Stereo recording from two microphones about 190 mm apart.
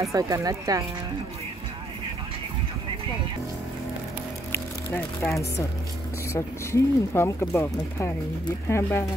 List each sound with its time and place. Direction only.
0.0 s speech: 15° right (ahead or behind)
4.5 s music: 5° left (ahead or behind)
6.3 s speech: 15° left (ahead or behind)